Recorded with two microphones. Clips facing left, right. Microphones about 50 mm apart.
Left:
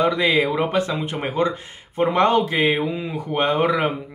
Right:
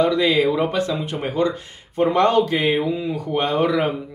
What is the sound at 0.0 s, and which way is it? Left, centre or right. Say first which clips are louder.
Speech: right 1 dB; left.